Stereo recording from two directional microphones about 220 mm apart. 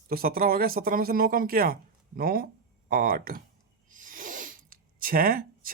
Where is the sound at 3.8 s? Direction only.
35° right (ahead or behind).